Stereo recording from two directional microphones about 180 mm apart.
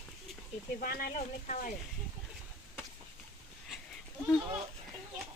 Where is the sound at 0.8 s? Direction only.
55° left (ahead or behind).